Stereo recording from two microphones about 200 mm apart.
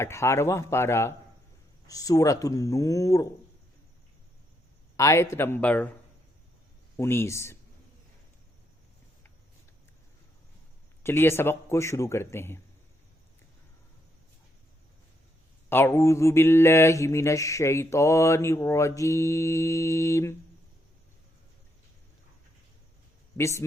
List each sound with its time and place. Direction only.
0.0 s mantra: 15° left (ahead or behind)
4.9 s mantra: 15° left (ahead or behind)
6.9 s mantra: 10° left (ahead or behind)
11.0 s mantra: 10° left (ahead or behind)
15.7 s mantra: 10° left (ahead or behind)
23.4 s mantra: 15° left (ahead or behind)